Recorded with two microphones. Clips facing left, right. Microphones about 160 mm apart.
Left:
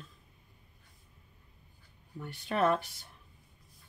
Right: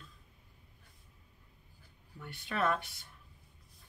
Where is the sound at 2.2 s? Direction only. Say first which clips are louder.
Left 5 dB; 40° left (ahead or behind).